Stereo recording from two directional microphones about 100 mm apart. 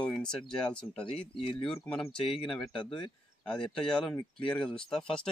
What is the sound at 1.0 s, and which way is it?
Speech, 65° left (ahead or behind).